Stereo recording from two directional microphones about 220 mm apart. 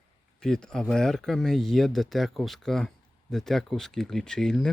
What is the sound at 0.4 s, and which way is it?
Speech, centre (ahead or behind).